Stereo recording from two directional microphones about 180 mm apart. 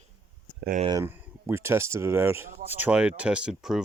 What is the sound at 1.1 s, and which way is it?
Speech, 15° right (ahead or behind).